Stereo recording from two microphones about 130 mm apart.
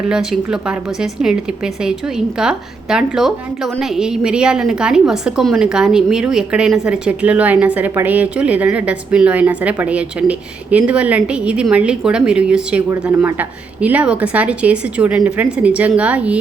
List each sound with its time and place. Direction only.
0.1 s a woman's voice: 5° right (ahead or behind)